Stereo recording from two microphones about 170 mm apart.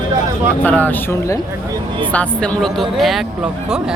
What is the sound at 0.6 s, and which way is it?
Speech, 10° left (ahead or behind).